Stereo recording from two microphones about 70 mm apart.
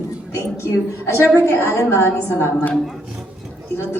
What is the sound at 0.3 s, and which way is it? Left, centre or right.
A man's voice, left.